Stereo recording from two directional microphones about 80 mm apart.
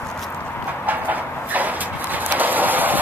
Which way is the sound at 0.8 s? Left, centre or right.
Right.